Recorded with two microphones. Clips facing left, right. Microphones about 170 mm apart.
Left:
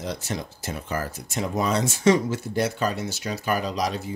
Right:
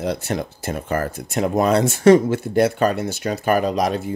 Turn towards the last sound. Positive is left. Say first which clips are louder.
# right 7 dB
turn(degrees=-55)  # may be behind; listen again after turning